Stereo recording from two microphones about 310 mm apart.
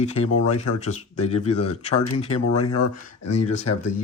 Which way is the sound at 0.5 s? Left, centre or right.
Left.